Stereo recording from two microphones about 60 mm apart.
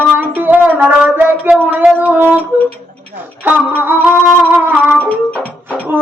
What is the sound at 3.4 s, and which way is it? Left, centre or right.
Singing, right.